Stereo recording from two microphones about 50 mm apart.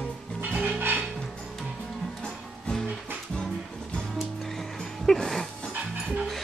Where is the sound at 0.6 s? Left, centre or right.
Right.